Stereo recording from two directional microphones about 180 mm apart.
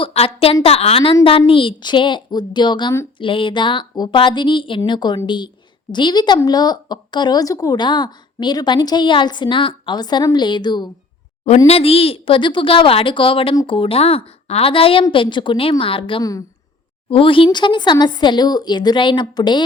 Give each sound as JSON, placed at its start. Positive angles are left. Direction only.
{"t": 0.0, "sound": "a woman's voice", "side_deg": 35}
{"t": 11.4, "sound": "a woman's voice", "side_deg": 35}